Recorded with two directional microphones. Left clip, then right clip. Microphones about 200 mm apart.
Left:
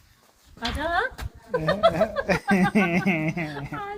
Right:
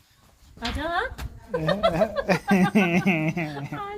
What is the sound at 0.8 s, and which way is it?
Speech, 10° left (ahead or behind).